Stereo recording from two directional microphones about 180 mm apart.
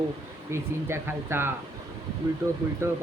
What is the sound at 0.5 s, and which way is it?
Speech, 15° right (ahead or behind).